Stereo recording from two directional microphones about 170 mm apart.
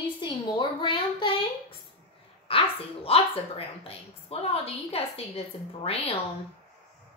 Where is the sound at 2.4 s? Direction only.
35° left (ahead or behind).